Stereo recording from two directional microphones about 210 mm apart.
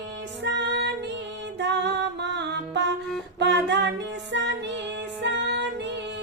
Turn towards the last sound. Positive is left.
turn(degrees=-55)  # may be behind; listen again after turning